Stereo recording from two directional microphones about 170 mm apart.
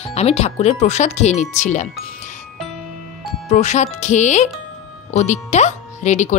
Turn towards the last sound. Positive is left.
turn(degrees=45)  # may be behind; listen again after turning